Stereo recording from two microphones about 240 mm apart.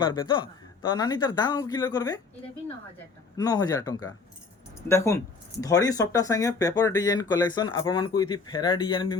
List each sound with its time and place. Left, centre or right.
0.0 s speech: centre
3.3 s speech: centre